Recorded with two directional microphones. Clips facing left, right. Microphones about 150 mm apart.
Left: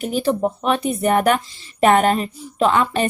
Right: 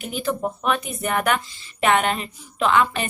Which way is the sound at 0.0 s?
35° left (ahead or behind).